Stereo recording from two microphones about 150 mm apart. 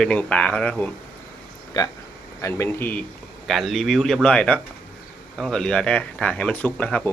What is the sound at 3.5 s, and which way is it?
Speech, centre (ahead or behind).